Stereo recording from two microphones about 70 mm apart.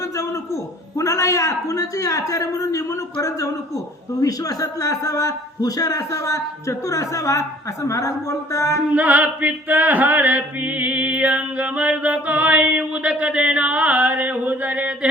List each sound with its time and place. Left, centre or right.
0.2 s a sound: left
4.2 s a man's voice: left
8.9 s chant: right